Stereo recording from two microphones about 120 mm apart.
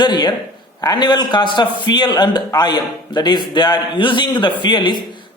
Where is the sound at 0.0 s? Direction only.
40° left (ahead or behind).